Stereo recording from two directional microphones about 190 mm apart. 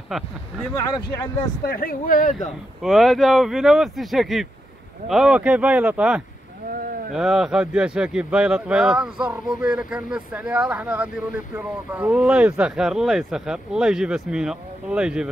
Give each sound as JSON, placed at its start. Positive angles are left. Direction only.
{"t": 0.1, "sound": "speech", "side_deg": 0}
{"t": 1.7, "sound": "speech", "side_deg": 50}
{"t": 2.8, "sound": "speech", "side_deg": 0}
{"t": 6.7, "sound": "a sound", "side_deg": -50}
{"t": 7.1, "sound": "speech", "side_deg": 0}